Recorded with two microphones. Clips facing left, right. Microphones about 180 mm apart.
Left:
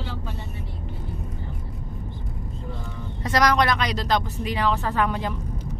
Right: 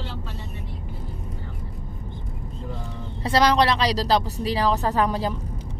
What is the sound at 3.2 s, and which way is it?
A woman's voice, 30° right (ahead or behind).